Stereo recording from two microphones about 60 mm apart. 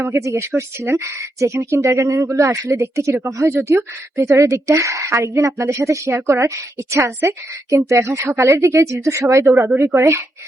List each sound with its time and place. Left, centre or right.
0.0 s a woman's voice: right
3.5 s a woman's voice: right
4.3 s a woman's voice: right